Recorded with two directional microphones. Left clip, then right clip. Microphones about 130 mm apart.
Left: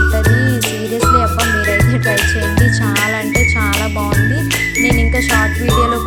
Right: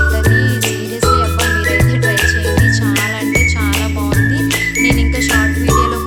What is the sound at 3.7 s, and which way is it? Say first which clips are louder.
Music: left 1 dB; centre (ahead or behind).